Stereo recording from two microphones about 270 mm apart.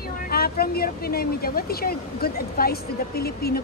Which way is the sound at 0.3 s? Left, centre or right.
Left.